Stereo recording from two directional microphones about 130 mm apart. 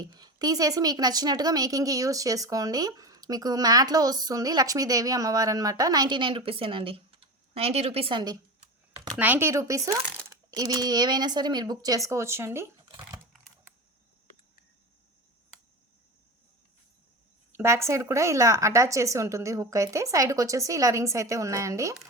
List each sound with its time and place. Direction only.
0.0 s speech: 30° right (ahead or behind)
9.1 s speech: 15° right (ahead or behind)
17.5 s speech: 20° right (ahead or behind)